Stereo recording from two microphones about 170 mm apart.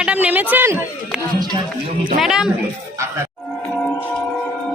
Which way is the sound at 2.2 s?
5° right (ahead or behind).